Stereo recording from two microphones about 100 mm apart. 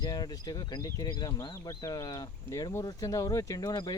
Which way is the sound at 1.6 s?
35° left (ahead or behind).